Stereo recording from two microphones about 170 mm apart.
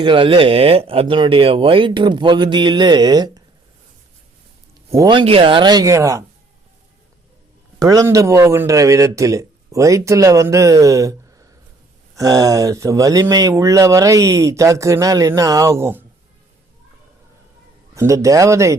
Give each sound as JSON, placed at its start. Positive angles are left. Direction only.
{"t": 0.0, "sound": "speech", "side_deg": -30}
{"t": 4.9, "sound": "speech", "side_deg": -20}
{"t": 7.8, "sound": "speech", "side_deg": -20}
{"t": 17.9, "sound": "speech", "side_deg": -20}